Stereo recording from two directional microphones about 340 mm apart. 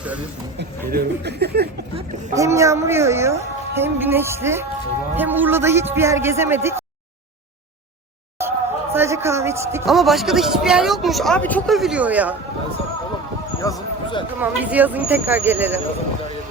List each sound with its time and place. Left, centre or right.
0.9 s speech: right
2.3 s a woman's voice: centre
8.4 s speech: centre
13.6 s speech: centre
14.3 s speech: centre